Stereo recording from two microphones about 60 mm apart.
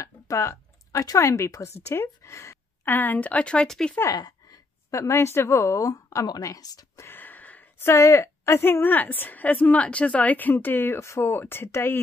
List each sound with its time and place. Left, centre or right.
0.0 s a sound: left
1.0 s a woman's voice: left
2.8 s speech: left
3.6 s speech: centre
4.1 s a woman's voice: left
7.1 s a sound: left
7.8 s a woman's voice: left
11.0 s a woman's voice: left
11.3 s a woman's voice: left